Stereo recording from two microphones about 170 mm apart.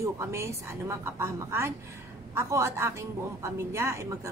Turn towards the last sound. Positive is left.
turn(degrees=-15)  # may be behind; listen again after turning